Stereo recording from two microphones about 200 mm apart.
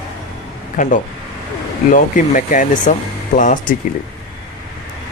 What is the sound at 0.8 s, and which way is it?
Speech, 40° left (ahead or behind).